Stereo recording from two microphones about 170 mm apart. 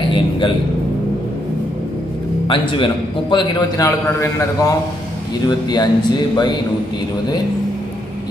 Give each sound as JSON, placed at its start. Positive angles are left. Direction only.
{"t": 2.4, "sound": "a man's voice", "side_deg": 30}